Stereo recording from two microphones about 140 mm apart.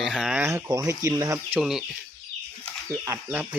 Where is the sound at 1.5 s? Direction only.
5° right (ahead or behind).